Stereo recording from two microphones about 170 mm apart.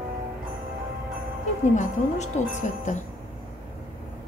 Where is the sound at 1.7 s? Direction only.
45° left (ahead or behind).